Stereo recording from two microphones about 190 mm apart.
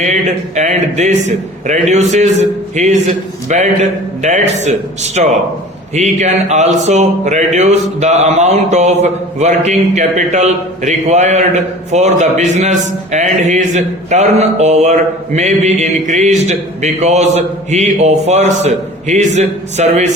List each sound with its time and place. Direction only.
0.0 s speech: 40° right (ahead or behind)